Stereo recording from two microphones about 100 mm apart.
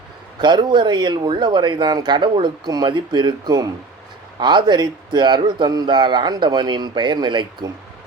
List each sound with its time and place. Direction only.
0.3 s speech: 50° right (ahead or behind)